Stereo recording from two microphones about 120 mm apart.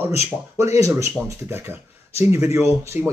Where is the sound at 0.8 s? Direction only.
25° right (ahead or behind).